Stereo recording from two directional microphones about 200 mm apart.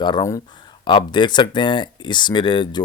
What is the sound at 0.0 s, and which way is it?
Speech, 20° left (ahead or behind).